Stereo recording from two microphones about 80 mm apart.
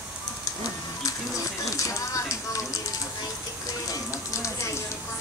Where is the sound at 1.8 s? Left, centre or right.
Left.